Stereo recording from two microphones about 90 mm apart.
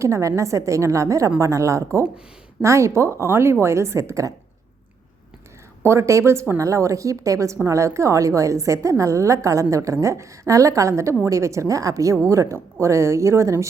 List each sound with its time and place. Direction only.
0.0 s a woman's voice: 35° right (ahead or behind)
5.8 s a woman's voice: 30° right (ahead or behind)